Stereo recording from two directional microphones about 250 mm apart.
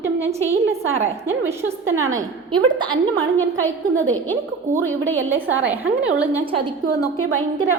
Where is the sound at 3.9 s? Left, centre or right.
Centre.